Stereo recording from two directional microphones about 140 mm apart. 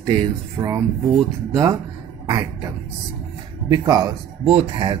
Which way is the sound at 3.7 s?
25° right (ahead or behind).